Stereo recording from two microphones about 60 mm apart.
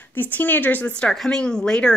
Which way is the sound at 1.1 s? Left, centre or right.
Centre.